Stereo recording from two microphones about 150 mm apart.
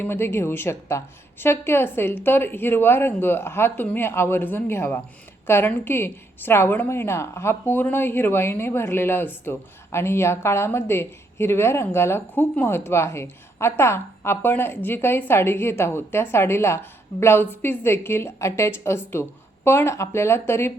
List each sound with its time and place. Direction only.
0.0 s a woman's voice: 15° left (ahead or behind)